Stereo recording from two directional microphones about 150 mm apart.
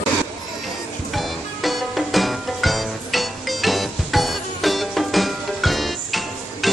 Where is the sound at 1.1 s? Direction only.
Centre (ahead or behind).